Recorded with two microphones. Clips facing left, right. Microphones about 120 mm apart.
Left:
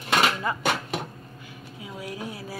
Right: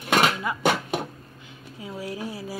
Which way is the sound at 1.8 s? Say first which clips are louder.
Right 3 dB; 35° right (ahead or behind).